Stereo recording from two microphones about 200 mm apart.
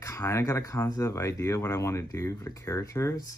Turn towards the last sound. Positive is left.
turn(degrees=15)  # may be behind; listen again after turning